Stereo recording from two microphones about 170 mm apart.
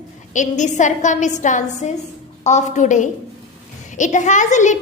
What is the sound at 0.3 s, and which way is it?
A child's voice, 45° left (ahead or behind).